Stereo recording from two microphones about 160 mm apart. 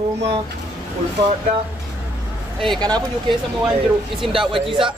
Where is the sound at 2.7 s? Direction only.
25° right (ahead or behind).